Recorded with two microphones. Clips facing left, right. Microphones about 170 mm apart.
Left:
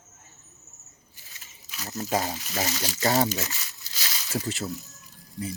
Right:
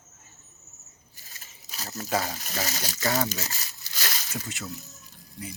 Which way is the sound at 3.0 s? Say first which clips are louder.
Left 4 dB; 35° left (ahead or behind).